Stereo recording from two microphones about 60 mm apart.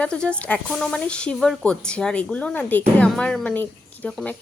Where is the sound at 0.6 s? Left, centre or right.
Centre; by 3.0 s left.